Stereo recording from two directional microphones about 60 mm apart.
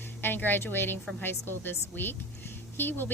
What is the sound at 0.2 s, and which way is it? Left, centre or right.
A woman's voice, left.